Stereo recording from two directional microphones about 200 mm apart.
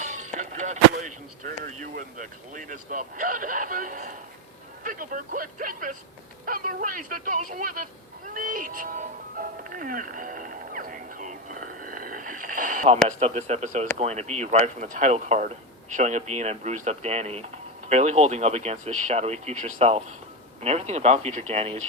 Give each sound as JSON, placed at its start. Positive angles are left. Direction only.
{"t": 0.0, "sound": "speech", "side_deg": -35}
{"t": 8.3, "sound": "music", "side_deg": -45}
{"t": 9.6, "sound": "a sound", "side_deg": -40}
{"t": 13.1, "sound": "speech", "side_deg": -35}